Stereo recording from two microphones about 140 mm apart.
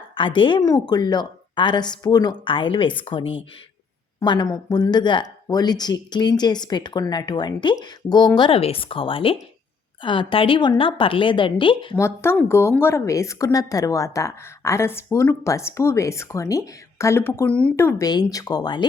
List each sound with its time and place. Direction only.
0.1 s speech: 35° left (ahead or behind)
11.9 s a woman's voice: 20° left (ahead or behind)
17.7 s a woman's voice: 20° left (ahead or behind)